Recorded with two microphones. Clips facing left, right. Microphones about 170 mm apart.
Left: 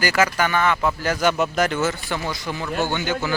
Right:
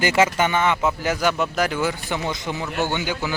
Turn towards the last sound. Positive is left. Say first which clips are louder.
# left 1 dB
turn(degrees=-15)  # may be behind; listen again after turning